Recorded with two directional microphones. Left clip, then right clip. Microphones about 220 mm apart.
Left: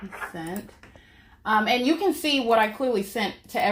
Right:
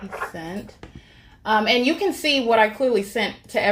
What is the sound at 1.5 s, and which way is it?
A woman's voice, 15° left (ahead or behind).